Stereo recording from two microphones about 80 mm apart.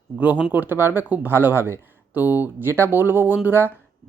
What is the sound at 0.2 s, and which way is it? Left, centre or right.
Speech, centre.